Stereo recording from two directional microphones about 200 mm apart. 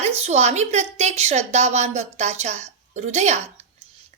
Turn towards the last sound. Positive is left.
turn(degrees=-35)  # may be behind; listen again after turning